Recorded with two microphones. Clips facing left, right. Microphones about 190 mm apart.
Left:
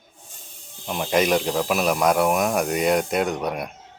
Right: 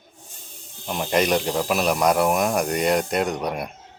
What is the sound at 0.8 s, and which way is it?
Speech, centre (ahead or behind).